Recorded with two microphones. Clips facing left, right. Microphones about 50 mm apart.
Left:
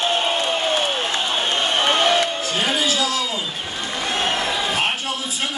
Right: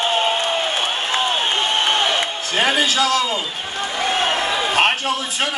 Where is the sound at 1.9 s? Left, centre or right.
Centre.